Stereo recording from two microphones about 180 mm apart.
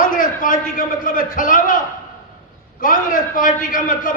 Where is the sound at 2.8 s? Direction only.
50° left (ahead or behind).